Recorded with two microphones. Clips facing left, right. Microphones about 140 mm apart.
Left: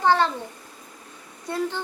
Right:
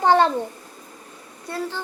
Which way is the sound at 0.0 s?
15° right (ahead or behind).